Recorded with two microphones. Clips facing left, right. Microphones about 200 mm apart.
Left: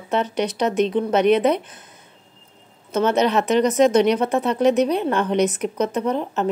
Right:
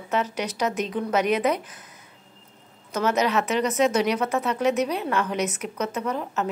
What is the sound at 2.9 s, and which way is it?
A woman's voice, 30° left (ahead or behind).